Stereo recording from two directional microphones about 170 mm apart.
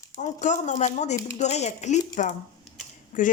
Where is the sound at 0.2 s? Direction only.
45° left (ahead or behind).